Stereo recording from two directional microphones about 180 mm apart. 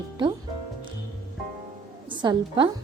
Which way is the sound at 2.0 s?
25° right (ahead or behind).